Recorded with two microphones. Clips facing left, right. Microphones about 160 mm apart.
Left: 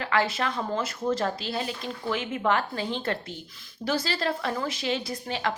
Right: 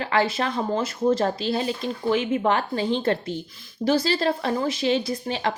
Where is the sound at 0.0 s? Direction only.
25° right (ahead or behind).